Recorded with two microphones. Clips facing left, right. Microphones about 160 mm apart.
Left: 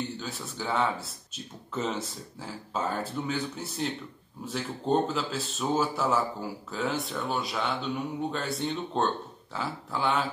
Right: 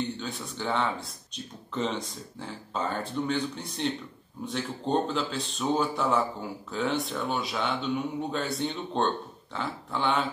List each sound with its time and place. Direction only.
0.2 s a man's voice: centre (ahead or behind)